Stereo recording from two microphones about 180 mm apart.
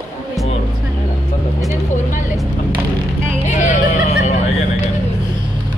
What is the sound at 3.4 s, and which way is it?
Hubbub, 45° left (ahead or behind).